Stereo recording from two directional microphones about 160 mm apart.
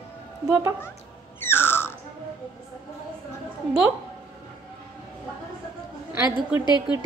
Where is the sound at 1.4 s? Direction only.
15° left (ahead or behind).